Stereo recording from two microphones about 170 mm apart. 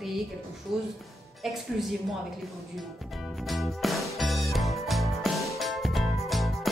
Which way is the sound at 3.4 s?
Centre (ahead or behind).